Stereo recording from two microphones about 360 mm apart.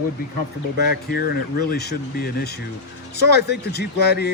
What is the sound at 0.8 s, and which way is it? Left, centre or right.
Speech, left.